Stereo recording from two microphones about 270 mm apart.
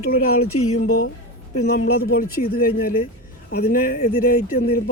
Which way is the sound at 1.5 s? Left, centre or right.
Left.